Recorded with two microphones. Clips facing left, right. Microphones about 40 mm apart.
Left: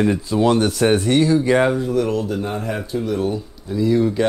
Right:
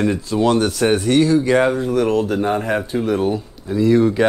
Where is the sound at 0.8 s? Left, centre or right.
Centre.